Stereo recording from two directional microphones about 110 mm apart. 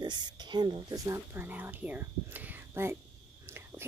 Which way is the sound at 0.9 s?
25° right (ahead or behind).